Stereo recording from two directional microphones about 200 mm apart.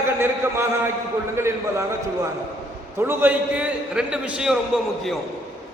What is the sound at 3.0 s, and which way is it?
A man's voice, 10° right (ahead or behind).